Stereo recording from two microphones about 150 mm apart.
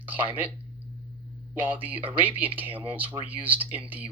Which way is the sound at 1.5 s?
10° right (ahead or behind).